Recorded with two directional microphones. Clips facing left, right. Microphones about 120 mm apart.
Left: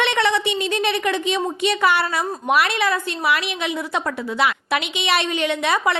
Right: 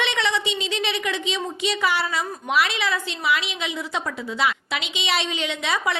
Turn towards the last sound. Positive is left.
turn(degrees=55)  # may be behind; listen again after turning